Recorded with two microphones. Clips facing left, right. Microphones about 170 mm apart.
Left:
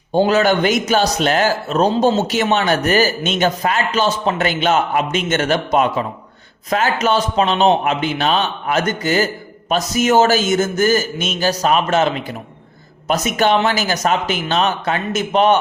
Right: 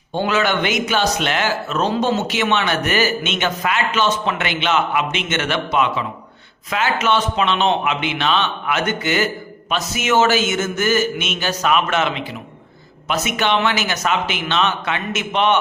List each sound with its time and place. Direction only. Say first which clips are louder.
0.1 s speech: left 5 dB; 40° left (ahead or behind)